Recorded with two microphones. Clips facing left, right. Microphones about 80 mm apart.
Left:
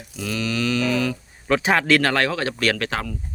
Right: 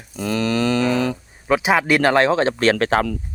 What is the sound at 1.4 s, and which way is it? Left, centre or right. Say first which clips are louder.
Speech: right 2 dB; centre.